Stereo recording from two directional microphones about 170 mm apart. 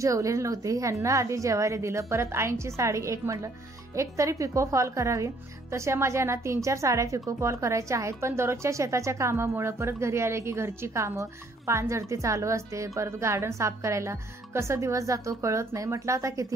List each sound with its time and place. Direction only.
0.0 s speech: 20° right (ahead or behind)